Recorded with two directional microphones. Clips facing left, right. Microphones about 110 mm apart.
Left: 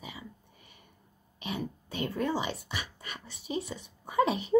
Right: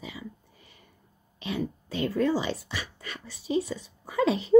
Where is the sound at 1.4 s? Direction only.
15° left (ahead or behind).